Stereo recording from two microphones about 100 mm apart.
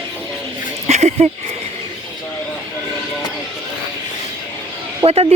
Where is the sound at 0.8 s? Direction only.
90° right.